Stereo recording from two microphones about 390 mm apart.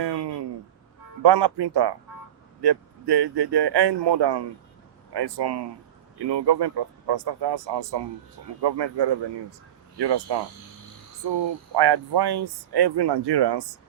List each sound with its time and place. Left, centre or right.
0.0 s a sound: right
1.2 s speech: right
5.1 s speech: right